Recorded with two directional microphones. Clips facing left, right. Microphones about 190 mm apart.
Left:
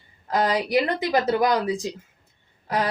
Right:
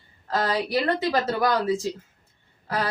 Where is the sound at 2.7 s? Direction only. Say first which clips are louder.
Left 3 dB; 20° left (ahead or behind).